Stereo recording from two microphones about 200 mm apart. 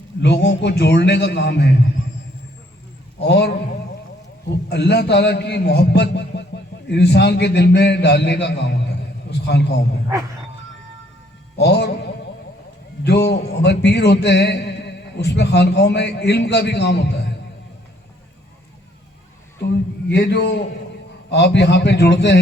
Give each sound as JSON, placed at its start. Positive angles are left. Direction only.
{"t": 0.2, "sound": "a man's voice", "side_deg": 60}
{"t": 3.2, "sound": "a man's voice", "side_deg": 60}
{"t": 4.7, "sound": "a man's voice", "side_deg": 55}
{"t": 11.5, "sound": "a sound", "side_deg": 55}
{"t": 13.1, "sound": "speech", "side_deg": 55}
{"t": 20.1, "sound": "a man's voice", "side_deg": 55}